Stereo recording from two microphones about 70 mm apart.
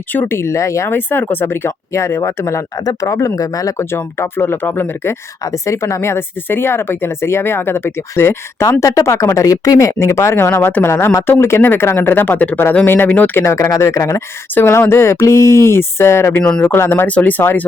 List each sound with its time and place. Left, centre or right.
0.1 s speech: left
0.3 s speech: left
0.9 s speech: left
2.7 s speech: left
3.8 s speech: left
5.4 s speech: left
8.8 s speech: left
13.4 s speech: left
14.5 s speech: left
16.4 s speech: centre
16.6 s speech: left
17.1 s speech: left